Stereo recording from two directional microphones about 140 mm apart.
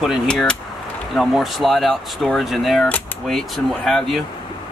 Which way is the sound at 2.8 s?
10° left (ahead or behind).